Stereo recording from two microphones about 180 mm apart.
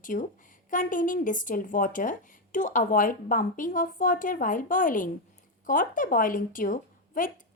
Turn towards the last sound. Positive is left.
turn(degrees=50)  # may be behind; listen again after turning